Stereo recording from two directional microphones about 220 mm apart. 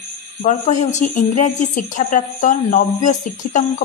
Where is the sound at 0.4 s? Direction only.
35° left (ahead or behind).